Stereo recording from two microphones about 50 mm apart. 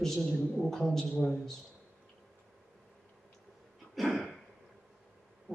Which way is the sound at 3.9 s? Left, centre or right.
Centre.